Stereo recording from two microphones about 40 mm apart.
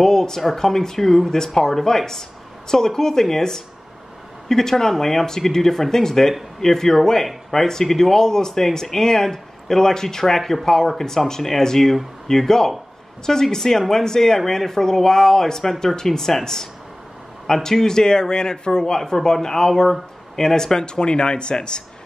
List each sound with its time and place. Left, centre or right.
0.0 s speech: centre
17.6 s speech: centre